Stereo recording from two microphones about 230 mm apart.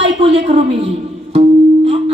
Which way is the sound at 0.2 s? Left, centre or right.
Right.